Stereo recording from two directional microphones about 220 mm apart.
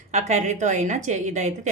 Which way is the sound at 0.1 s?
30° right (ahead or behind).